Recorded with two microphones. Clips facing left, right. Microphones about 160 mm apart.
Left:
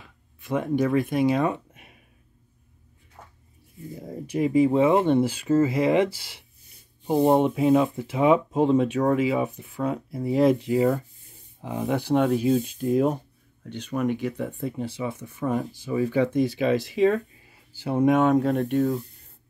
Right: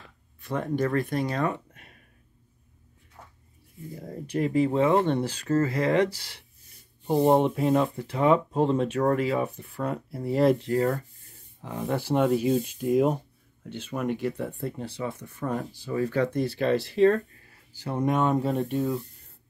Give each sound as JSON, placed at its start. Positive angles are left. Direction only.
{"t": 0.5, "sound": "speech", "side_deg": 10}
{"t": 1.7, "sound": "a sound", "side_deg": 10}
{"t": 3.9, "sound": "speech", "side_deg": 5}
{"t": 11.9, "sound": "speech", "side_deg": -5}
{"t": 16.3, "sound": "speech", "side_deg": 0}
{"t": 17.3, "sound": "a sound", "side_deg": 15}
{"t": 18.3, "sound": "speech", "side_deg": 0}